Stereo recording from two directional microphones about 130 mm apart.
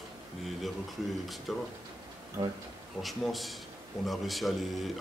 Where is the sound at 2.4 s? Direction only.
35° right (ahead or behind).